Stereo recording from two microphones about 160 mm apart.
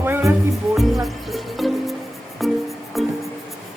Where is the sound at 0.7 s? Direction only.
Centre (ahead or behind).